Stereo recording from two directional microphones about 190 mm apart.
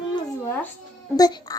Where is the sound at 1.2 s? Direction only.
20° left (ahead or behind).